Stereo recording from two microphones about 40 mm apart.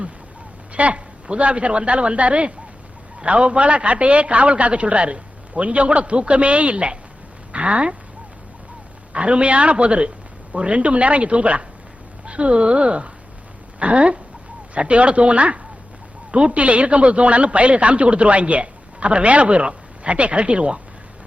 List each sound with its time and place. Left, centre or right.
0.7 s a man's voice: right
9.1 s a man's voice: right